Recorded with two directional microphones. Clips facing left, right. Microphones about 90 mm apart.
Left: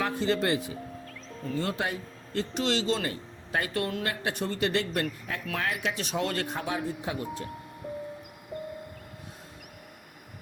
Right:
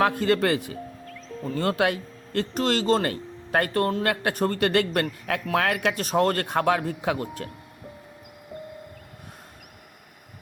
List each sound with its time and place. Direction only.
0.0 s speech: 60° right (ahead or behind)
2.6 s speech: 45° right (ahead or behind)
4.0 s speech: 60° right (ahead or behind)